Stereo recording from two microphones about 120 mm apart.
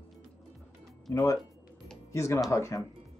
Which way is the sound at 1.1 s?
30° left (ahead or behind).